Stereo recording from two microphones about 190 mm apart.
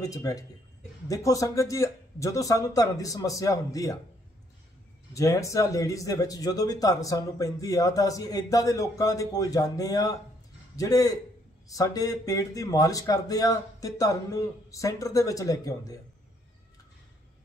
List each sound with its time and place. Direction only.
0.0 s a man's voice: 20° left (ahead or behind)
5.1 s a man's voice: 15° left (ahead or behind)